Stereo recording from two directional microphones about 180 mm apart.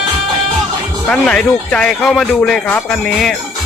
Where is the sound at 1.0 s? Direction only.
5° left (ahead or behind).